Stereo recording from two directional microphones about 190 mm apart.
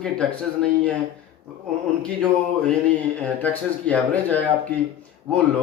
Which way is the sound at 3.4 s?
10° left (ahead or behind).